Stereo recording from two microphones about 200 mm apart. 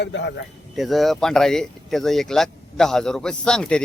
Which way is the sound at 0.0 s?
60° left (ahead or behind).